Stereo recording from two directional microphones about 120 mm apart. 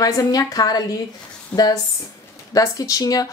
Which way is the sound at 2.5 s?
30° left (ahead or behind).